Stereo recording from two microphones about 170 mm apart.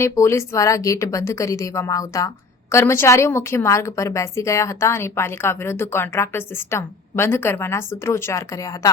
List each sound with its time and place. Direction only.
0.0 s a woman's voice: 15° left (ahead or behind)